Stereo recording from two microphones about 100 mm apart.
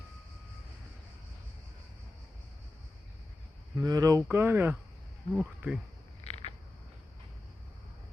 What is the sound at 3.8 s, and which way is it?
Speech, 35° right (ahead or behind).